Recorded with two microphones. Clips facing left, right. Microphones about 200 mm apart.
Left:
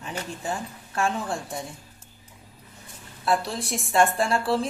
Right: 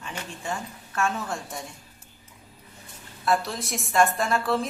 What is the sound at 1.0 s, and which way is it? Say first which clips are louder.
Speech: left 1 dB; 30° left (ahead or behind).